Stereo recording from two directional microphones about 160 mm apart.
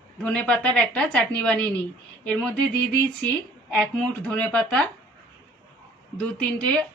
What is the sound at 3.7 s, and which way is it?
Speech, 5° left (ahead or behind).